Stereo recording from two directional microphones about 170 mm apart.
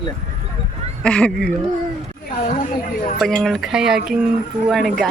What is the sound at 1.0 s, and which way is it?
Speech, 5° left (ahead or behind).